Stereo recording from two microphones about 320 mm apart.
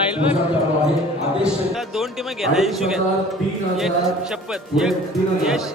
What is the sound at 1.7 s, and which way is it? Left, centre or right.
Speech, centre.